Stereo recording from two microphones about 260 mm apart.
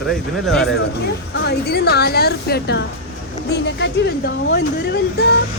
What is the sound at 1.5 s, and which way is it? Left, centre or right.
Speech, left.